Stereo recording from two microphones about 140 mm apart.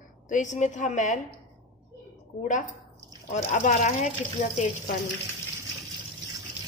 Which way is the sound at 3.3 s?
55° left (ahead or behind).